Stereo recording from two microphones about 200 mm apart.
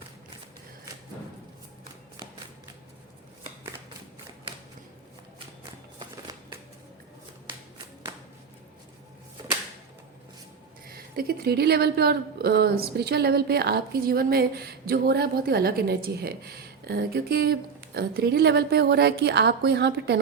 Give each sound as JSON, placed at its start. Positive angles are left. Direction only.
{"t": 10.8, "sound": "a woman's voice", "side_deg": -50}